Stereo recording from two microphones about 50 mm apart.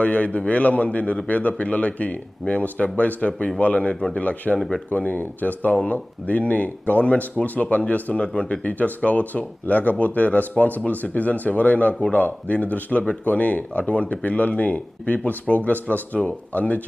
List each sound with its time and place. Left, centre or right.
0.0 s speech: left